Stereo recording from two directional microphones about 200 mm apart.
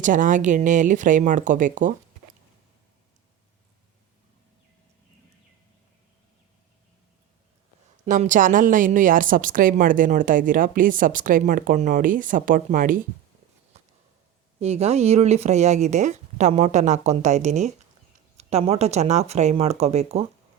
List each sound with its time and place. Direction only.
0.0 s speech: 40° right (ahead or behind)
8.0 s a woman's voice: 40° right (ahead or behind)
13.7 s a sound: 35° right (ahead or behind)
14.6 s speech: 30° right (ahead or behind)